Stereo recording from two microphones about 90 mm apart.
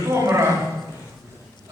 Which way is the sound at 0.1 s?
30° right (ahead or behind).